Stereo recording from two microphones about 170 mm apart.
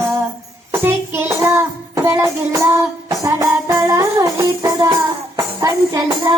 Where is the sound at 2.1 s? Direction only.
20° right (ahead or behind).